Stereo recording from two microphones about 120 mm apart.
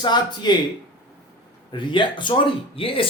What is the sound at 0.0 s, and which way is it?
Speech, 35° left (ahead or behind).